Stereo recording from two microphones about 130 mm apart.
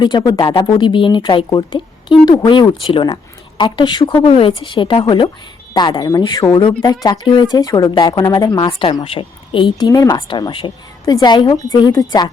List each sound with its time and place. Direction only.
0.0 s speech: 35° left (ahead or behind)